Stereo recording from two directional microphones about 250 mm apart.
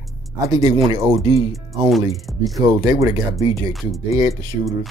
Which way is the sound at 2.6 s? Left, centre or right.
Centre.